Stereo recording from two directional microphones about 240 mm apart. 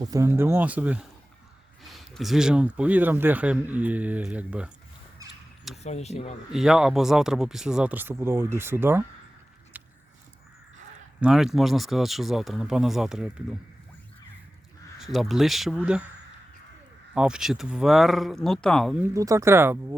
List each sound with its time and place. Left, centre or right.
0.0 s speech: centre
5.7 s speech: left
6.5 s speech: centre
9.7 s biting: centre
11.2 s speech: centre
14.9 s speech: centre
17.2 s speech: centre